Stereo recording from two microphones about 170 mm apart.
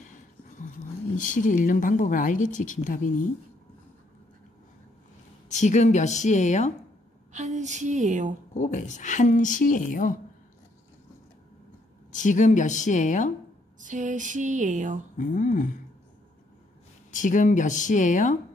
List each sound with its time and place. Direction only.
1.1 s speech: 50° left (ahead or behind)
5.5 s speech: 45° left (ahead or behind)
7.3 s a sound: 45° right (ahead or behind)
8.5 s speech: 45° left (ahead or behind)
12.1 s speech: 45° left (ahead or behind)
13.7 s a sound: 50° right (ahead or behind)
15.1 s speech: 50° left (ahead or behind)
17.1 s speech: 50° left (ahead or behind)